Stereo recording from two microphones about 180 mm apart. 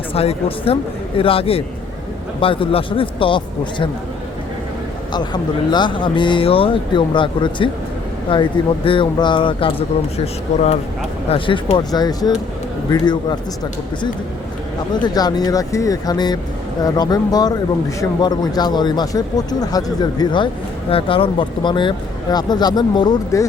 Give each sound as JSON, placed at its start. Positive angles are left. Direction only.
{"t": 0.1, "sound": "speech", "side_deg": 35}
{"t": 5.1, "sound": "speech", "side_deg": 25}
{"t": 11.3, "sound": "speech", "side_deg": 30}
{"t": 15.0, "sound": "speech", "side_deg": 20}